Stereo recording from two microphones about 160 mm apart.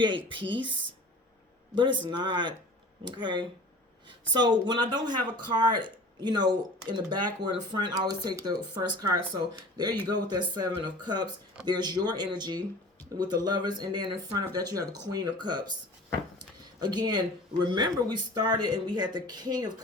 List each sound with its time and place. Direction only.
0.0 s speech: 30° right (ahead or behind)
16.8 s speech: 25° right (ahead or behind)